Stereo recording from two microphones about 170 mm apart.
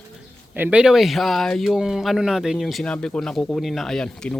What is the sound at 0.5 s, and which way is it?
Speech, 10° right (ahead or behind).